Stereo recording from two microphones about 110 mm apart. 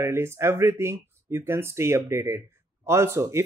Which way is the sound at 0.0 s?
25° right (ahead or behind).